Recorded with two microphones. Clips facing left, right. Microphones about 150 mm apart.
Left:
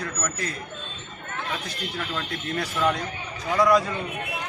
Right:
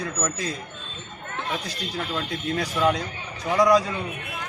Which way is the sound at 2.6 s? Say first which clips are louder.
Right 2 dB; 15° right (ahead or behind).